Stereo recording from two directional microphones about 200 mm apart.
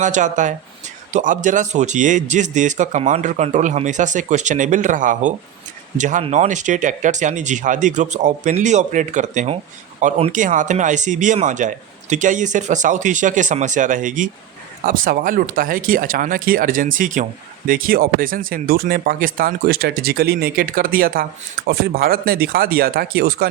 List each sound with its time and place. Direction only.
0.0 s speech: 40° right (ahead or behind)